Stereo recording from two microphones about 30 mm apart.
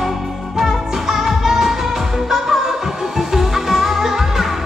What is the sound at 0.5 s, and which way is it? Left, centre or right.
Music, centre.